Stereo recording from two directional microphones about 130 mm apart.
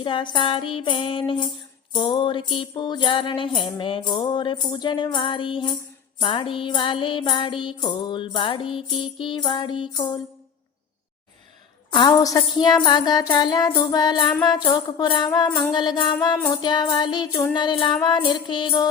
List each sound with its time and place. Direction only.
0.0 s music: 40° left (ahead or behind)
11.9 s a woman's voice: 40° left (ahead or behind)
12.2 s music: 30° left (ahead or behind)
15.4 s music: 15° left (ahead or behind)
15.7 s music: 35° left (ahead or behind)